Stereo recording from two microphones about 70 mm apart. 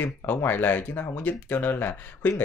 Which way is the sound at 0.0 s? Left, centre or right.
Left.